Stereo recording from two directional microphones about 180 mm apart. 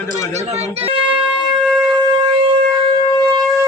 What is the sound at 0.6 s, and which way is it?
Speech, 35° right (ahead or behind).